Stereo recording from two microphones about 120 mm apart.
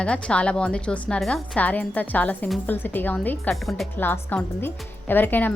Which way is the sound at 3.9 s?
15° left (ahead or behind).